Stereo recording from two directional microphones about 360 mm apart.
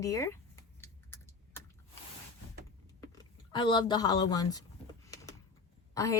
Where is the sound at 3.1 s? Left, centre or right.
Centre.